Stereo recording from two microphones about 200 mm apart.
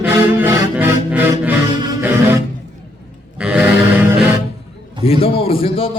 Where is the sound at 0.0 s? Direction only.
10° right (ahead or behind).